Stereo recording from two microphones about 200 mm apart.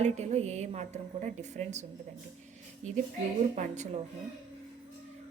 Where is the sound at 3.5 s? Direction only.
35° right (ahead or behind).